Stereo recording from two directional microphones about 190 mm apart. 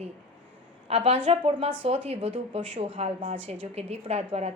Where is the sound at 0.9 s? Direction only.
30° right (ahead or behind).